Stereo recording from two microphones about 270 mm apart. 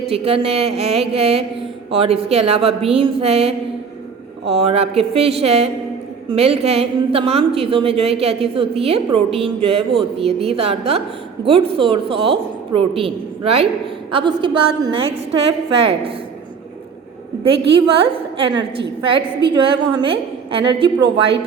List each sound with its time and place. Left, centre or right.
0.1 s a woman's voice: right
17.7 s a woman's voice: centre